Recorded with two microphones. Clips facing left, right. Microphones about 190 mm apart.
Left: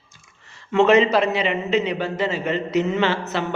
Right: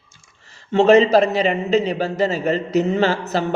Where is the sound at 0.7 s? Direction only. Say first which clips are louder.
Right 3 dB; 35° right (ahead or behind).